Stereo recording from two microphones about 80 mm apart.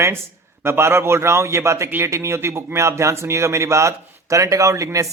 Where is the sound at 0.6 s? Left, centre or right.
Right.